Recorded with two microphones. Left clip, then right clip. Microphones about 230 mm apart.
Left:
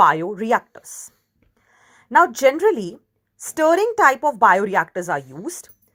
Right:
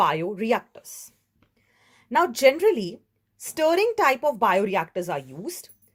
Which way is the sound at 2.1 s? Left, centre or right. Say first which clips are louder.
Left 4 dB; centre.